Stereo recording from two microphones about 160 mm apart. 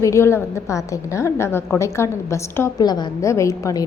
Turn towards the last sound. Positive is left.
turn(degrees=20)  # may be behind; listen again after turning